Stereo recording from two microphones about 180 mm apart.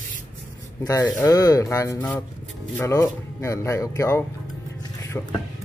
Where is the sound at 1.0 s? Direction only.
20° left (ahead or behind).